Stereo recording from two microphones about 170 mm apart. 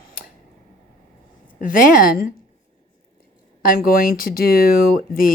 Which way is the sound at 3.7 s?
60° left (ahead or behind).